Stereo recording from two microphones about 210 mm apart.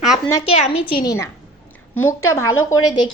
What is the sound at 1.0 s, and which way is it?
Speech, 15° left (ahead or behind).